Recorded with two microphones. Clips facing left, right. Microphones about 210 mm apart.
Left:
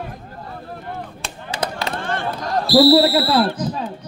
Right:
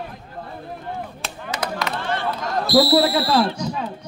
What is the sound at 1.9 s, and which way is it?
Chop, 50° left (ahead or behind).